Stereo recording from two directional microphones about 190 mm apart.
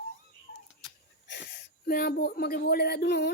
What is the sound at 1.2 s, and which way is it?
Speech, 65° left (ahead or behind).